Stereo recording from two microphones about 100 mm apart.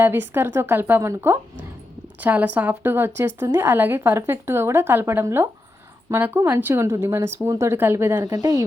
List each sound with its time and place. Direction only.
0.0 s a woman's voice: 20° right (ahead or behind)